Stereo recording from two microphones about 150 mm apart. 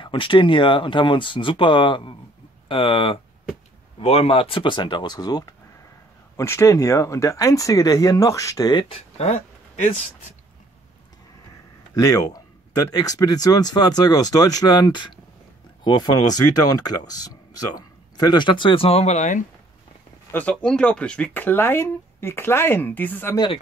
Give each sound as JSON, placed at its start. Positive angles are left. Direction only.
{"t": 0.0, "sound": "speech", "side_deg": 35}
{"t": 11.9, "sound": "speech", "side_deg": 25}
{"t": 20.2, "sound": "speech", "side_deg": 10}